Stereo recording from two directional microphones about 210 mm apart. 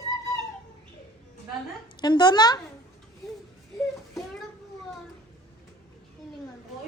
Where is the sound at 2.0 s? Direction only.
20° left (ahead or behind).